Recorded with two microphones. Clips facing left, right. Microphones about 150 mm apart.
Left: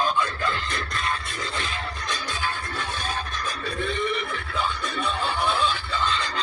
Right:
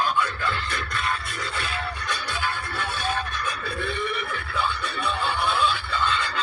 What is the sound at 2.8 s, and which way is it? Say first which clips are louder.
Music: right 5 dB; 40° left (ahead or behind).